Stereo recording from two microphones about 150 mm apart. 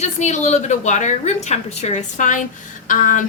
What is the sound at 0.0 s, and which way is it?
A woman's voice, 50° left (ahead or behind).